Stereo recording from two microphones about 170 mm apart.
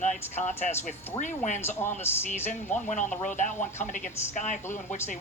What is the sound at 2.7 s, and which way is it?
Speech, 45° left (ahead or behind).